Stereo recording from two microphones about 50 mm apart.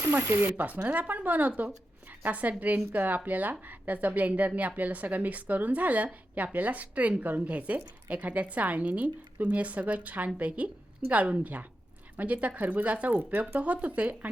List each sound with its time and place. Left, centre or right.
0.1 s speech: right
0.5 s a woman's voice: right